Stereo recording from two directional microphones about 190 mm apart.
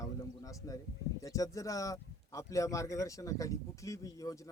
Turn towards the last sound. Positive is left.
turn(degrees=15)  # may be behind; listen again after turning